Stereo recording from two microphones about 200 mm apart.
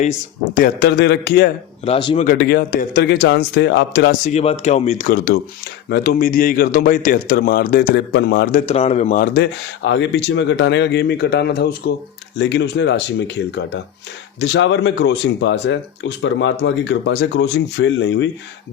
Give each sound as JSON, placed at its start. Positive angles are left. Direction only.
{"t": 0.0, "sound": "speech", "side_deg": 40}
{"t": 1.8, "sound": "speech", "side_deg": 25}
{"t": 2.2, "sound": "speech", "side_deg": 50}
{"t": 8.6, "sound": "speech", "side_deg": 30}